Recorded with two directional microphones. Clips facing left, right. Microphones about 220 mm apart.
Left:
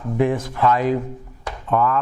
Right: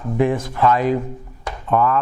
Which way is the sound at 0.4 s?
15° right (ahead or behind).